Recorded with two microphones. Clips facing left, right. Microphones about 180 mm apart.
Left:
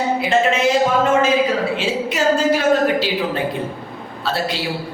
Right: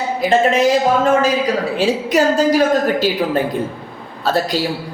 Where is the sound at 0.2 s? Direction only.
35° right (ahead or behind).